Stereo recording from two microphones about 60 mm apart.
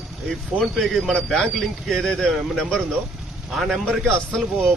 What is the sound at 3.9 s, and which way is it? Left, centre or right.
Speech, centre.